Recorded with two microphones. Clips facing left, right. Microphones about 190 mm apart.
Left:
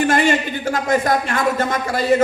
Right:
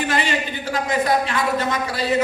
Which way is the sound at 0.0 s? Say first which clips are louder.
Left 6 dB; 50° left (ahead or behind).